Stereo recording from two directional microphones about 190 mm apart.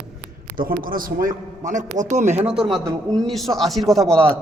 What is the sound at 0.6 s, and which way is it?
A man's voice, 50° right (ahead or behind).